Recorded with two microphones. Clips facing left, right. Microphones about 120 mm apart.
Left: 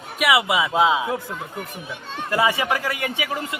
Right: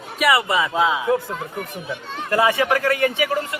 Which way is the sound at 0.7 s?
20° left (ahead or behind).